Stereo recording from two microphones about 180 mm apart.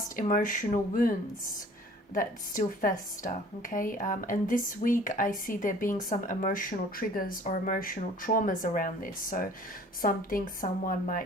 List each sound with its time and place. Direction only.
0.2 s a woman's voice: 45° left (ahead or behind)
2.1 s a woman's voice: 45° left (ahead or behind)